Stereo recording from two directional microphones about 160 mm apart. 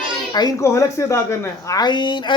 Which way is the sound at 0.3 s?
20° left (ahead or behind).